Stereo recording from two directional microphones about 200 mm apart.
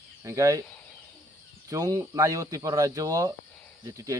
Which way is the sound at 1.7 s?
15° right (ahead or behind).